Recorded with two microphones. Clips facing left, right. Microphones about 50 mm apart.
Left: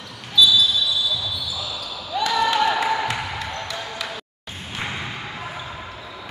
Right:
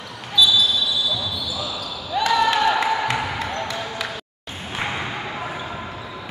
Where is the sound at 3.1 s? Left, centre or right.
Centre.